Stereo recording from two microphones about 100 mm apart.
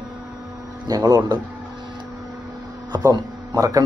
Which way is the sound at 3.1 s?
35° right (ahead or behind).